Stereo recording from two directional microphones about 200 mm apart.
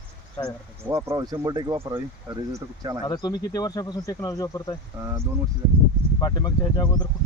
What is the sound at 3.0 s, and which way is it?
Speech, 20° left (ahead or behind).